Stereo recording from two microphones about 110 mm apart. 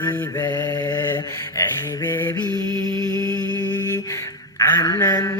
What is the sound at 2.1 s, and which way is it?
Mantra, 20° left (ahead or behind).